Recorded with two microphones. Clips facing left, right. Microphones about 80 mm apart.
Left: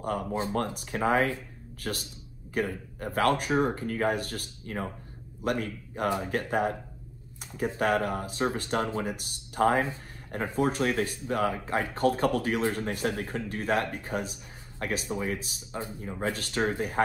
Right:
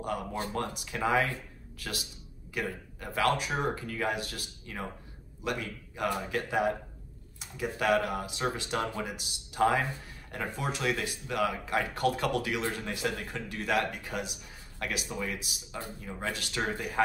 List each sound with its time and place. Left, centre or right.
0.3 s speech: left
0.6 s a man's voice: left
10.4 s a man's voice: left
16.3 s a man's voice: left